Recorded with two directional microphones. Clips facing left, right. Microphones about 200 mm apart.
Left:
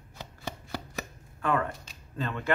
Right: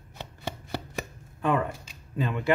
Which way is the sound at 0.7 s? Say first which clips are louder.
Right 3 dB; 20° right (ahead or behind).